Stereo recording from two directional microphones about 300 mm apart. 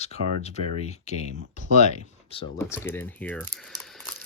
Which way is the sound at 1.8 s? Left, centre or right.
Left.